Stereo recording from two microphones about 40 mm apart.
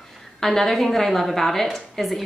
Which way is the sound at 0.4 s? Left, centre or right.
Centre.